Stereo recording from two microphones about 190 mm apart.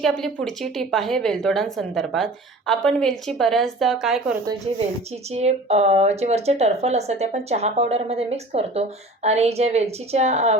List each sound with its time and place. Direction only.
0.0 s a woman's voice: centre (ahead or behind)
5.3 s speech: 35° right (ahead or behind)